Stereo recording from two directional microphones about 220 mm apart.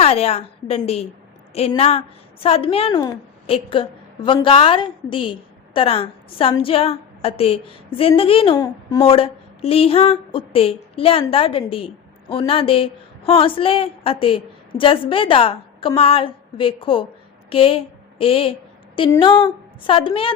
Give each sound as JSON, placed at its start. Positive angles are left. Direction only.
{"t": 0.0, "sound": "a woman's voice", "side_deg": 30}